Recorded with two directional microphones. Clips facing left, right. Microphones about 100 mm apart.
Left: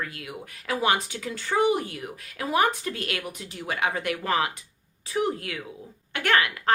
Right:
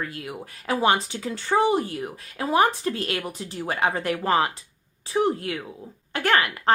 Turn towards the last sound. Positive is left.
turn(degrees=-30)  # may be behind; listen again after turning